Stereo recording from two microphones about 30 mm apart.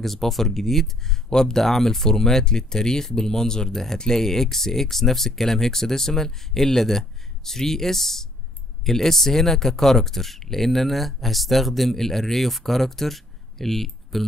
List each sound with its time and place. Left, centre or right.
0.0 s speech: centre